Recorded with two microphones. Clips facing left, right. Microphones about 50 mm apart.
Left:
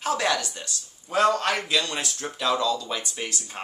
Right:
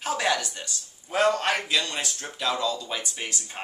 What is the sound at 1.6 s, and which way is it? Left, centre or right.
Speech, centre.